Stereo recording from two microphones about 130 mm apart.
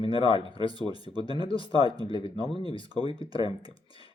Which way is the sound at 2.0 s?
40° left (ahead or behind).